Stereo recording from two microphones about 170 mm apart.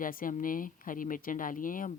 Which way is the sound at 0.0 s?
55° left (ahead or behind).